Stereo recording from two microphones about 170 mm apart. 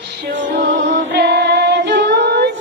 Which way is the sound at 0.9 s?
85° right.